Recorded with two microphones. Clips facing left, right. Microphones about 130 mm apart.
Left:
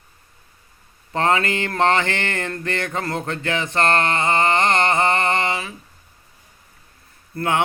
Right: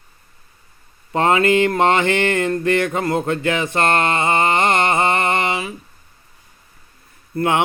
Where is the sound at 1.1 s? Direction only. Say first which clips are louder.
Right 5 dB; 20° right (ahead or behind).